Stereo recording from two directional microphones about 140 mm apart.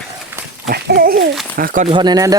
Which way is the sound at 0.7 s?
90° right.